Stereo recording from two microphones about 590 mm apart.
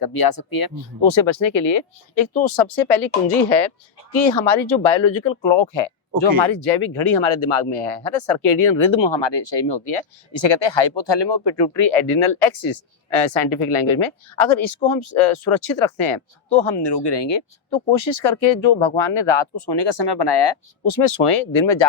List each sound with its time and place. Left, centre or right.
0.0 s speech: left
1.2 s speech: left
4.1 s speech: left